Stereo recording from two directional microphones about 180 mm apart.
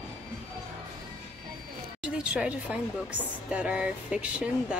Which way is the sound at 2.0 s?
5° right (ahead or behind).